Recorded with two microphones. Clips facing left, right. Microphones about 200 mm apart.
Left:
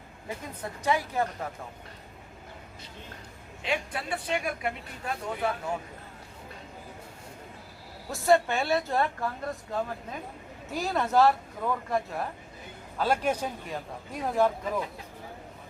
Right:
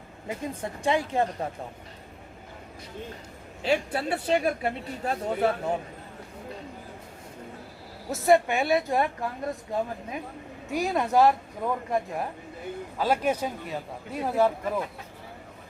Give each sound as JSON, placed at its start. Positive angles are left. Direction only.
{"t": 0.3, "sound": "a woman's voice", "side_deg": -25}
{"t": 3.6, "sound": "a man's voice", "side_deg": -35}
{"t": 8.1, "sound": "speech", "side_deg": -20}